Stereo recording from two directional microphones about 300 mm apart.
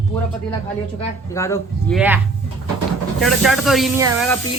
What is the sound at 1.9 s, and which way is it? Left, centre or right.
Speech, centre.